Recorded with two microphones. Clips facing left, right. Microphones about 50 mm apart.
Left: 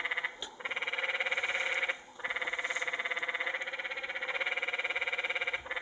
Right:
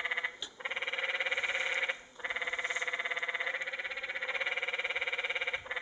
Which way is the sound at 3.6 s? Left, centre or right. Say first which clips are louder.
Even; centre.